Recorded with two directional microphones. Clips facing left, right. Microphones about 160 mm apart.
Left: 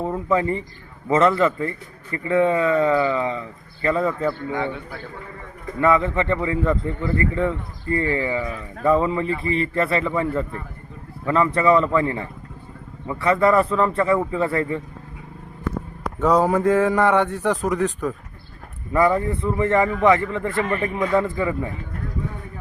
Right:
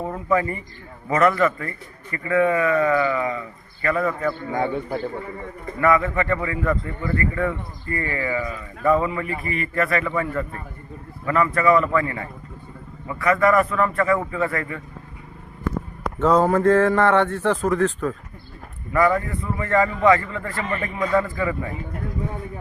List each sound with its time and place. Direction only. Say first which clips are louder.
0.3 s a man's voice: even; 25° left (ahead or behind)
4.5 s a man's voice: right 3 dB; 45° right (ahead or behind)
5.8 s a man's voice: left 1 dB; 25° left (ahead or behind)
16.2 s a man's voice: right 1 dB; 10° left (ahead or behind)
20.7 s a man's voice: left 2 dB; 5° left (ahead or behind); by 21.7 s 20° left (ahead or behind)